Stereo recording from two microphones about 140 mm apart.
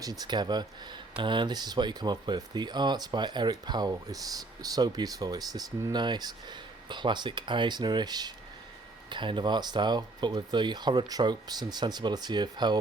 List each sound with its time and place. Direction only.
0.0 s speech: 25° right (ahead or behind)